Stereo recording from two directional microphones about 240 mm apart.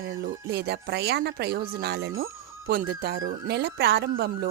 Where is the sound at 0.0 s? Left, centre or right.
Right.